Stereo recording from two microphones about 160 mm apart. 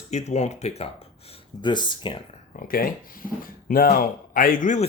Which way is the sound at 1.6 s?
30° left (ahead or behind).